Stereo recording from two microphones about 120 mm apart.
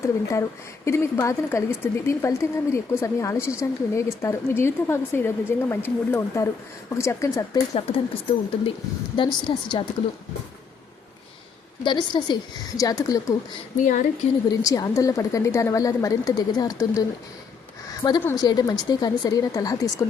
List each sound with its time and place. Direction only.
0.0 s speech: 25° left (ahead or behind)
7.7 s a woman's voice: 55° left (ahead or behind)
11.8 s a woman's voice: 40° left (ahead or behind)
13.7 s a woman's voice: 90° left
14.6 s a woman's voice: 30° left (ahead or behind)